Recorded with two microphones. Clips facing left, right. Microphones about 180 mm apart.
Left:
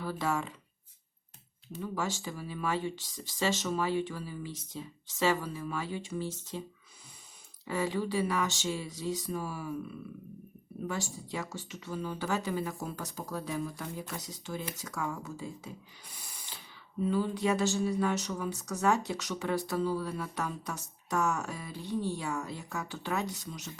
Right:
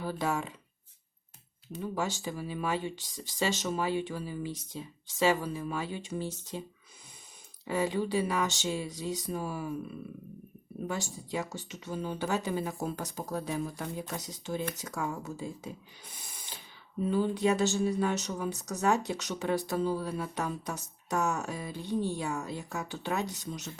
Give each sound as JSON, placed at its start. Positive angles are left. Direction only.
{"t": 0.0, "sound": "speech", "side_deg": -15}
{"t": 1.7, "sound": "speech", "side_deg": -20}
{"t": 7.7, "sound": "speech", "side_deg": -20}
{"t": 10.8, "sound": "speech", "side_deg": -15}
{"t": 17.1, "sound": "speech", "side_deg": -25}